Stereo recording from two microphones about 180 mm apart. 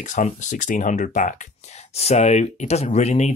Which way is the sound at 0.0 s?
45° left (ahead or behind).